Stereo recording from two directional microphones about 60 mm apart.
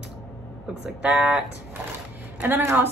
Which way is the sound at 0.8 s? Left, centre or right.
Centre.